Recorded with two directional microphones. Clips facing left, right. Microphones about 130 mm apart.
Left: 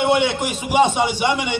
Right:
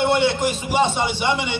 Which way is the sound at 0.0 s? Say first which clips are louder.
Even; 10° left (ahead or behind).